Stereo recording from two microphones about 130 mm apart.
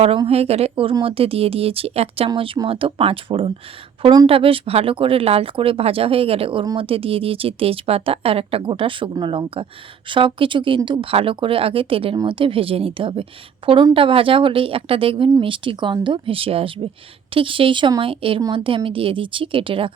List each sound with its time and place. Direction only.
0.3 s a woman's voice: 50° right (ahead or behind)